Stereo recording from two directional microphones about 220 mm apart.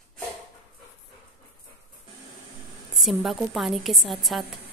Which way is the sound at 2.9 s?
Centre (ahead or behind).